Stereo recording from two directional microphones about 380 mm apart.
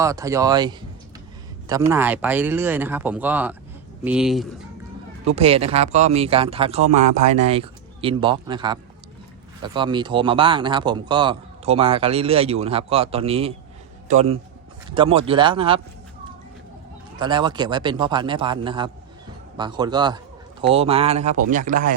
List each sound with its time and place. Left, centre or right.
0.0 s speech: centre
5.2 s speech: centre
17.2 s a man's voice: centre